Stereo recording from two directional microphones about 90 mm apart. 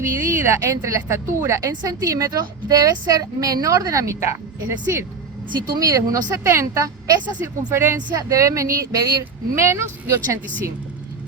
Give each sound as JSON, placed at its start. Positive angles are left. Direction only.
{"t": 0.2, "sound": "a woman's voice", "side_deg": -30}
{"t": 7.7, "sound": "a woman's voice", "side_deg": -30}